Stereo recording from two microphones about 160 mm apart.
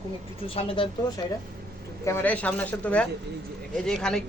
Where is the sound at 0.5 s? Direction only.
35° left (ahead or behind).